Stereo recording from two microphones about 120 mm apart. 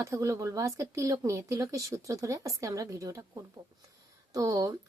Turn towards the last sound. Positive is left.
turn(degrees=-25)  # may be behind; listen again after turning